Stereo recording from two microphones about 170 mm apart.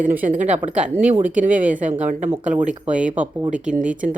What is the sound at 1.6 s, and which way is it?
Speech, 50° right (ahead or behind).